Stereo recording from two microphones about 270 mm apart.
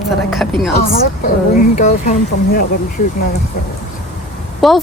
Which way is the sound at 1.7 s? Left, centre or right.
Left.